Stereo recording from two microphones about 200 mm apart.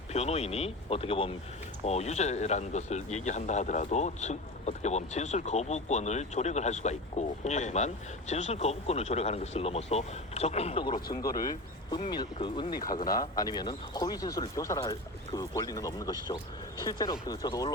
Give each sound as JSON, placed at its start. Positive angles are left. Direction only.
{"t": 0.1, "sound": "speech", "side_deg": 30}